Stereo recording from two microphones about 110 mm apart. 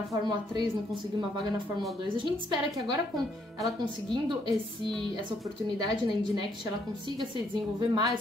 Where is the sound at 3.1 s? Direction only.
Centre (ahead or behind).